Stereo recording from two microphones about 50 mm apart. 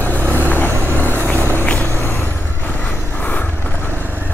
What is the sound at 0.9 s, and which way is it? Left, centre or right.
Vehicle, left.